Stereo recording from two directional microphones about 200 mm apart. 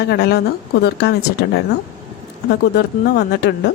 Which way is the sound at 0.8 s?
55° left (ahead or behind).